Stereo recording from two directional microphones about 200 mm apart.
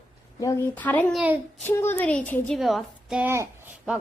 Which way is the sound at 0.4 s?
10° left (ahead or behind).